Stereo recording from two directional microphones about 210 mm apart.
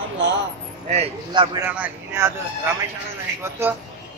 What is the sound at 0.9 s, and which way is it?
Speech, 30° right (ahead or behind).